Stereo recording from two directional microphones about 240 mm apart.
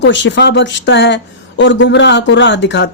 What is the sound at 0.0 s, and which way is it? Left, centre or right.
Speech, left.